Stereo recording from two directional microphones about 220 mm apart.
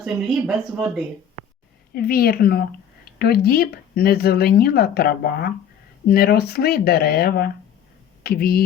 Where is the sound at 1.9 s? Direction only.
45° left (ahead or behind).